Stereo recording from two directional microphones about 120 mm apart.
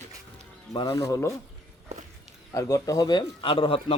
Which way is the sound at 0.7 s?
30° left (ahead or behind).